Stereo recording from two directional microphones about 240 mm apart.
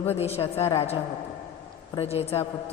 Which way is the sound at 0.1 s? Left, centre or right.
Left.